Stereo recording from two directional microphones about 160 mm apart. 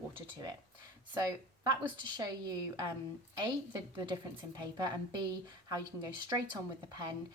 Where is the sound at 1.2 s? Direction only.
25° right (ahead or behind).